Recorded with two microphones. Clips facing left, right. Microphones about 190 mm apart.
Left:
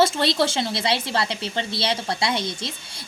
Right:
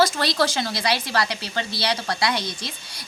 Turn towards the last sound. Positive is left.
turn(degrees=25)  # may be behind; listen again after turning